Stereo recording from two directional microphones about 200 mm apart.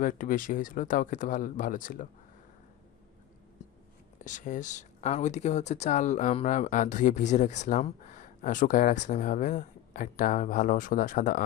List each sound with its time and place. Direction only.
0.0 s speech: 40° left (ahead or behind)
4.2 s speech: 40° left (ahead or behind)